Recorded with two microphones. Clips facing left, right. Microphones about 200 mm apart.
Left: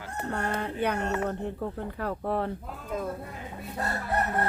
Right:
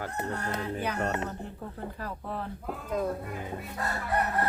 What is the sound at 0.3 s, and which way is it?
Music, 60° left (ahead or behind).